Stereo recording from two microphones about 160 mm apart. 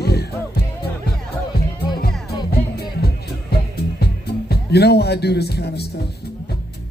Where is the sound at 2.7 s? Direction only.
75° left (ahead or behind).